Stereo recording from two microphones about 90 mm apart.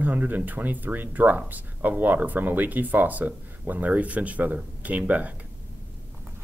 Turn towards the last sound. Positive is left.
turn(degrees=-15)  # may be behind; listen again after turning